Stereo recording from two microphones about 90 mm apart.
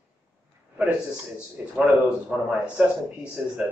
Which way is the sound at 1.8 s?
10° right (ahead or behind).